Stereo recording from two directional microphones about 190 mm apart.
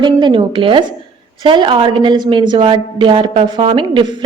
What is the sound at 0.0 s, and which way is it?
A woman's voice, 25° right (ahead or behind).